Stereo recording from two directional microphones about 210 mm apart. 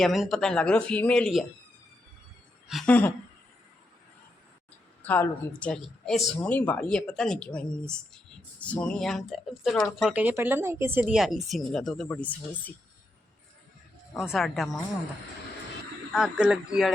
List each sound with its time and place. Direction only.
0.0 s speech: centre (ahead or behind)
2.6 s speech: 5° left (ahead or behind)
5.0 s speech: 10° left (ahead or behind)
14.1 s speech: centre (ahead or behind)
16.1 s speech: 5° right (ahead or behind)